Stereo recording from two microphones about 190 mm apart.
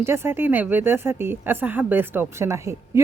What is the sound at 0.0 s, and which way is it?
Speech, 15° right (ahead or behind).